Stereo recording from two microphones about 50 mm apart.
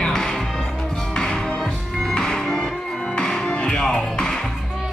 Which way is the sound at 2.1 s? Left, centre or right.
Centre.